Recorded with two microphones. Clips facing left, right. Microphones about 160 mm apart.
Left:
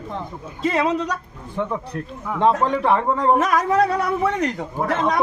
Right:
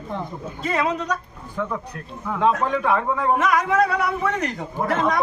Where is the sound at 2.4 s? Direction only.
30° left (ahead or behind).